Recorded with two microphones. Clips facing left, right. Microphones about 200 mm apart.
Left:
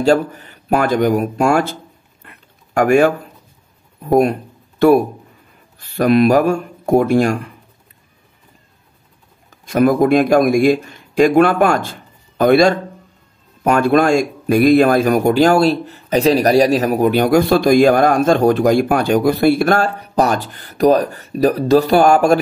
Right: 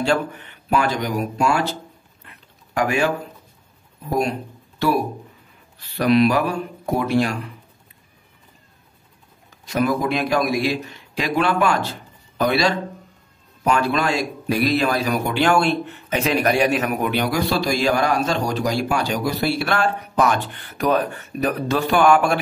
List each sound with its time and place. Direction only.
0.0 s speech: 40° left (ahead or behind)
2.2 s a sound: 50° left (ahead or behind)
4.1 s speech: 50° left (ahead or behind)
9.7 s a man's voice: 55° left (ahead or behind)